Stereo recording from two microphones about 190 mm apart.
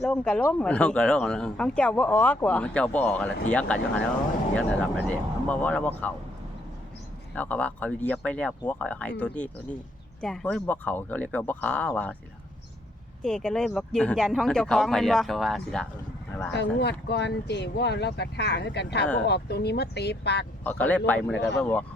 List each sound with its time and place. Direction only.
0.0 s speech: 5° left (ahead or behind)
7.3 s speech: 10° left (ahead or behind)
13.2 s speech: 5° left (ahead or behind)
17.1 s speech: 65° left (ahead or behind)
20.7 s speech: 10° left (ahead or behind)